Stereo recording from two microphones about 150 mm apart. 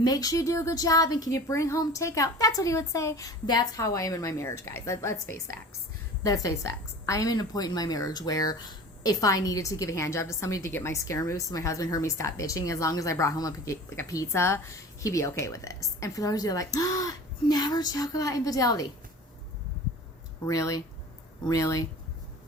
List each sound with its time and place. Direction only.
0.0 s a woman's voice: 25° left (ahead or behind)
6.2 s a woman's voice: 25° left (ahead or behind)
20.4 s a woman's voice: 20° left (ahead or behind)